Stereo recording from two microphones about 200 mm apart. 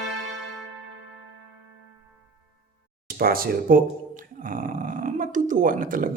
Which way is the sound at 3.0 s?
50° right (ahead or behind).